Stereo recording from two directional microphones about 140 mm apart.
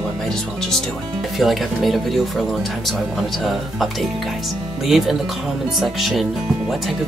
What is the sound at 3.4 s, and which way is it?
Speech, centre (ahead or behind).